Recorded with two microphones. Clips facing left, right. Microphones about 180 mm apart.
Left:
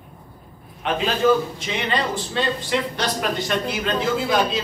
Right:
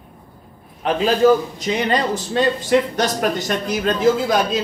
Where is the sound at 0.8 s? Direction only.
35° right (ahead or behind).